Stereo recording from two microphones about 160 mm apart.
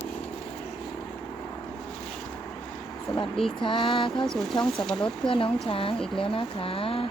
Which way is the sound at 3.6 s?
30° left (ahead or behind).